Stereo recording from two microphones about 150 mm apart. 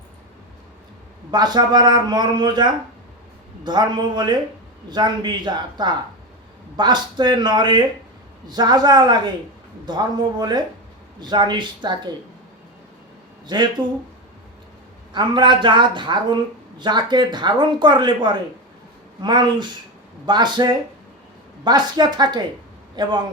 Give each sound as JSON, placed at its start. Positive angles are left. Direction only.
{"t": 1.3, "sound": "a man's voice", "side_deg": -30}
{"t": 13.5, "sound": "a man's voice", "side_deg": -30}
{"t": 15.1, "sound": "a man's voice", "side_deg": -30}